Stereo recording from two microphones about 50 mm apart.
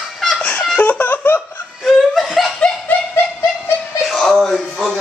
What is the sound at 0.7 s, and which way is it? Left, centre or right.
Laughter, left.